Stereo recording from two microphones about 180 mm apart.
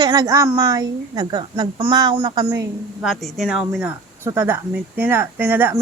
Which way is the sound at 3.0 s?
Centre (ahead or behind).